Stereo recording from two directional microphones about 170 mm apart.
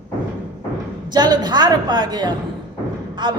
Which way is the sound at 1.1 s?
25° right (ahead or behind).